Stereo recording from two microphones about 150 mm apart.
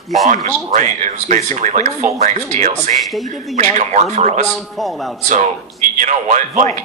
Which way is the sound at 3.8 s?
50° right (ahead or behind).